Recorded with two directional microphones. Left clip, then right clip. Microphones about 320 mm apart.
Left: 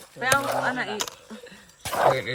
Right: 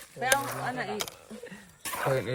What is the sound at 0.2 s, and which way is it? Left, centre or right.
Speech, left.